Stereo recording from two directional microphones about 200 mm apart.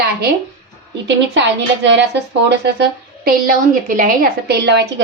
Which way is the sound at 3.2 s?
45° right (ahead or behind).